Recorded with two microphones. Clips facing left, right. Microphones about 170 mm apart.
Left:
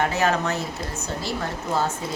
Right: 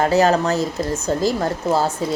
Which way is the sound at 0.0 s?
35° right (ahead or behind).